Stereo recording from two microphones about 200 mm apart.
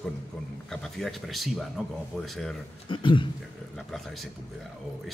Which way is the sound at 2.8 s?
25° left (ahead or behind).